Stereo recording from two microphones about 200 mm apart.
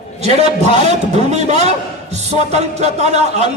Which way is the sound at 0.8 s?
35° right (ahead or behind).